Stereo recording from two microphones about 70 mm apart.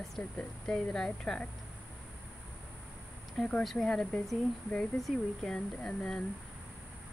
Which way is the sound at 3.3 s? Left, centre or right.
Centre.